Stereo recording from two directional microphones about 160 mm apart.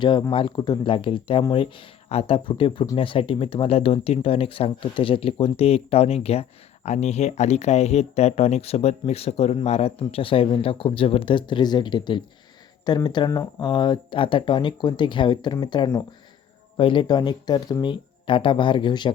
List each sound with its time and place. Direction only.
0.0 s speech: 30° left (ahead or behind)